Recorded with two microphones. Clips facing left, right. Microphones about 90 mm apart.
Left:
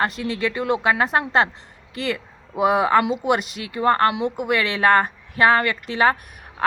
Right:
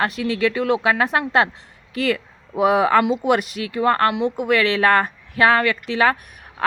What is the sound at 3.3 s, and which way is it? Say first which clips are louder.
Speech: right 3 dB; 30° left (ahead or behind).